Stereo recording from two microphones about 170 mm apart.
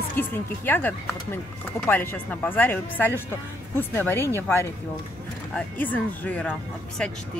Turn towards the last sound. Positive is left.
turn(degrees=5)  # may be behind; listen again after turning